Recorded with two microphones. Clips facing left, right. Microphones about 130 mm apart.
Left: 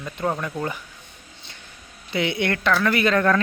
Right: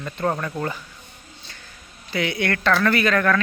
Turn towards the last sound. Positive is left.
turn(degrees=25)  # may be behind; listen again after turning